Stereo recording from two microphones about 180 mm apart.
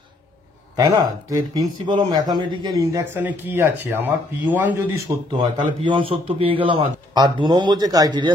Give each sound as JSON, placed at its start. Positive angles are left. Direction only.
{"t": 0.7, "sound": "speech", "side_deg": -20}